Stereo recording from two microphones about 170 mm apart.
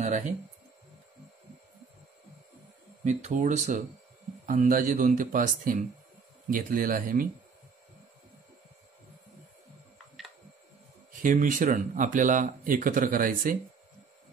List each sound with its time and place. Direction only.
3.0 s speech: 45° right (ahead or behind)
11.1 s speech: 50° right (ahead or behind)